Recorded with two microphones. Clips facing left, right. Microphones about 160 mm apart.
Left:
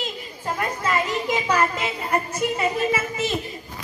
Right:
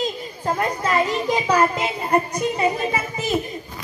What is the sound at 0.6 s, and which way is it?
A child's voice, 35° right (ahead or behind).